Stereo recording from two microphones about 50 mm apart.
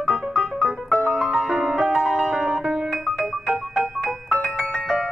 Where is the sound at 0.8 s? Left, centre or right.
Right.